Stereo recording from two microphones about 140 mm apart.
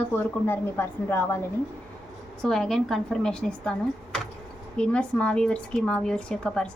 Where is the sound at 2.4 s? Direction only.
Centre (ahead or behind).